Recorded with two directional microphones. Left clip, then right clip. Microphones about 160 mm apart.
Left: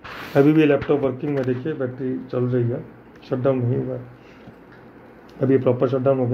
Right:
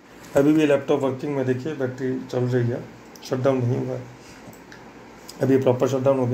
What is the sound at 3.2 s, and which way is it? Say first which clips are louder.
Speech: left 1 dB; 55° left (ahead or behind).